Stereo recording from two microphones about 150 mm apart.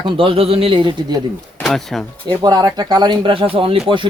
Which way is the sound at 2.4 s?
25° right (ahead or behind).